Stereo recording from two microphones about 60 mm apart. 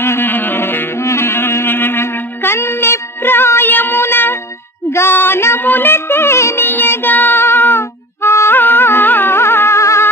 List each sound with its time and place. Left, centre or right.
0.0 s music: left
4.9 s a sound: left
5.7 s music: left